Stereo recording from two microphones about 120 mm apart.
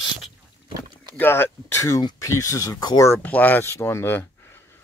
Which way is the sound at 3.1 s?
15° left (ahead or behind).